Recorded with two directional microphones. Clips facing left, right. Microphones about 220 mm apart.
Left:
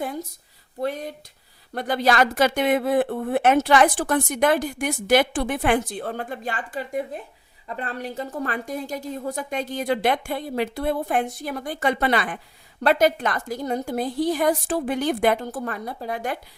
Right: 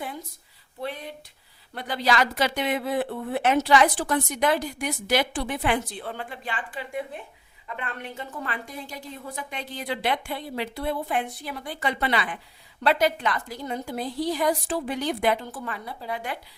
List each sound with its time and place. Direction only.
0.8 s speech: 45° left (ahead or behind)